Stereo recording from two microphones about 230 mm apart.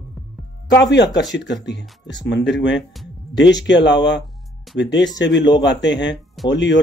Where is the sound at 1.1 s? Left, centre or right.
Left.